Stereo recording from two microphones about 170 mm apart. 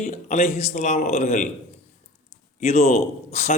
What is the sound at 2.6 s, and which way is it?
Speech, 40° left (ahead or behind).